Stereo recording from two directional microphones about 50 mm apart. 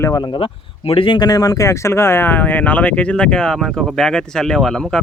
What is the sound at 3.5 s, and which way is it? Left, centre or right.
Speech, centre.